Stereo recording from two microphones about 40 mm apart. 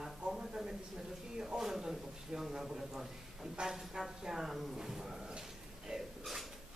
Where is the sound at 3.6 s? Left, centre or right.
Right.